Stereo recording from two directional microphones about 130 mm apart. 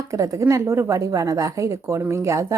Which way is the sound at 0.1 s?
25° right (ahead or behind).